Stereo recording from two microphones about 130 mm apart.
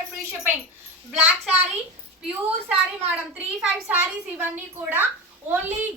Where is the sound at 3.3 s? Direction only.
10° right (ahead or behind).